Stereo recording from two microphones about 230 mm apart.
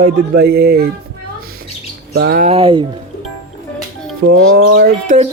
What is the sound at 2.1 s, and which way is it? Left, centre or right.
Speech, right.